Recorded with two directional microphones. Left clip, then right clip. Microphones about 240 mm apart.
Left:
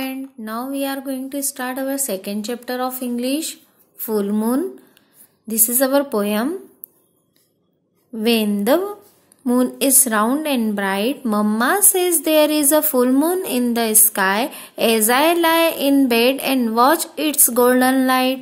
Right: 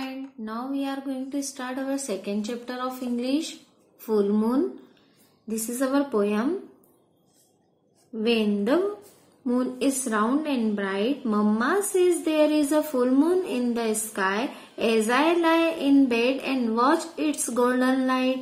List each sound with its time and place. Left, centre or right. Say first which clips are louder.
0.0 s speech: left 7 dB; left
8.2 s a woman's voice: left 5 dB; left